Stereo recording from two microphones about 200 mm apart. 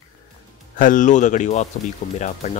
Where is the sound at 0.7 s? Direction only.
40° left (ahead or behind).